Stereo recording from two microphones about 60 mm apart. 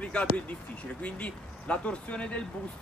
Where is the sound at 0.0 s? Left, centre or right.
Left.